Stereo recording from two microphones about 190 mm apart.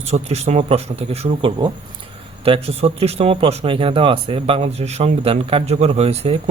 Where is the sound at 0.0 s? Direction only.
35° right (ahead or behind).